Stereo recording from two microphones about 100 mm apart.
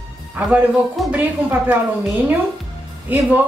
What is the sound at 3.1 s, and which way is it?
Speech, 15° right (ahead or behind).